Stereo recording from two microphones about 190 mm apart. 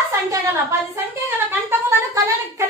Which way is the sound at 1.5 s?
15° right (ahead or behind).